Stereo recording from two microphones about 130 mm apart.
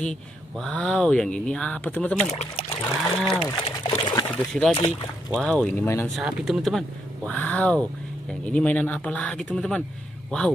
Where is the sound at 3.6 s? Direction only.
50° left (ahead or behind).